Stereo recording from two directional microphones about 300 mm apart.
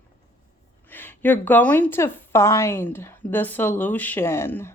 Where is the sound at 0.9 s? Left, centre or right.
Centre.